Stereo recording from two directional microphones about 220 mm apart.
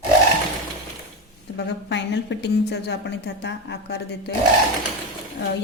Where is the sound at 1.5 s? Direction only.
50° left (ahead or behind).